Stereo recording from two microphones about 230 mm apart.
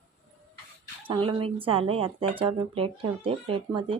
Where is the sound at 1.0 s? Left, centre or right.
Right.